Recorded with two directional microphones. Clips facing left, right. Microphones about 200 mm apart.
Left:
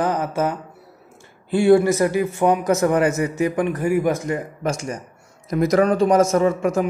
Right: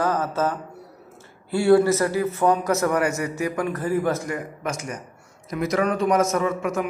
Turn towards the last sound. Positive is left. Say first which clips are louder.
# left 5 dB
turn(degrees=30)  # may be behind; listen again after turning